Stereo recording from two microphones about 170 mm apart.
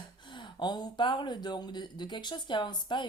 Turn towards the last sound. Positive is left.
turn(degrees=25)  # may be behind; listen again after turning